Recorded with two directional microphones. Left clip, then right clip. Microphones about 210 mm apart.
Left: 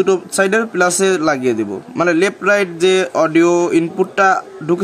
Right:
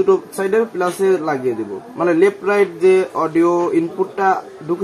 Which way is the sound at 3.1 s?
55° left (ahead or behind).